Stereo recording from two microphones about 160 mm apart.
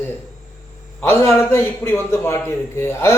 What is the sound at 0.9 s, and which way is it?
Speech, 15° left (ahead or behind).